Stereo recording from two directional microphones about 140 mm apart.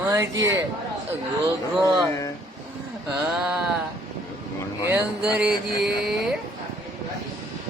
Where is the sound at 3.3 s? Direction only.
Centre (ahead or behind).